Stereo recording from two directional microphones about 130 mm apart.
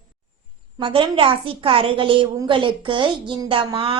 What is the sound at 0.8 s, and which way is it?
A woman's voice, 40° right (ahead or behind).